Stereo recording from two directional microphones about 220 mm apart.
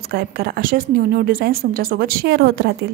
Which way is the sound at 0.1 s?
40° right (ahead or behind).